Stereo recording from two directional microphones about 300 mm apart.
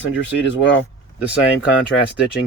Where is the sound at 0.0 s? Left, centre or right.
Left.